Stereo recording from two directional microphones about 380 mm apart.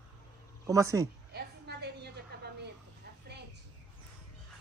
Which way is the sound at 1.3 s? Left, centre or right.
Right.